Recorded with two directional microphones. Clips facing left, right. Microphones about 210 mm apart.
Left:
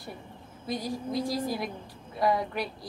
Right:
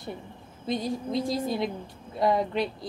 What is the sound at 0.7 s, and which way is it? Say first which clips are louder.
A woman's voice: right 3 dB; 25° right (ahead or behind).